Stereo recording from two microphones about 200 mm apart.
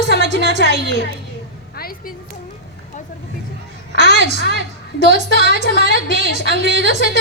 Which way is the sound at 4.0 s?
60° right (ahead or behind).